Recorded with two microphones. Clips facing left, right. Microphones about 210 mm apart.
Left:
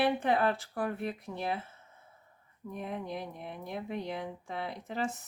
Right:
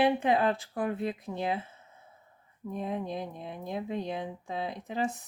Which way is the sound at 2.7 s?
20° right (ahead or behind).